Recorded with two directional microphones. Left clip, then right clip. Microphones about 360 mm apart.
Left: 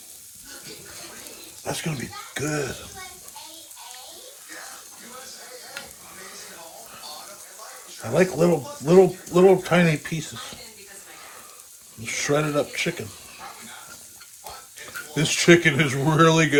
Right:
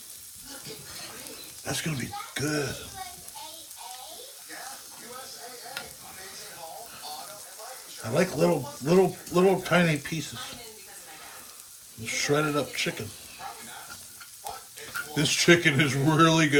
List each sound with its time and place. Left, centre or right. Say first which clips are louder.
1.6 s speech: left 3 dB; centre
5.8 s sizzle: left 1 dB; centre
8.1 s speech: left 4 dB; centre
12.0 s speech: left 2 dB; centre
15.1 s speech: left 4 dB; centre